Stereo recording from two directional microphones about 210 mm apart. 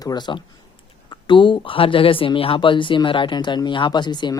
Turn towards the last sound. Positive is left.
turn(degrees=20)  # may be behind; listen again after turning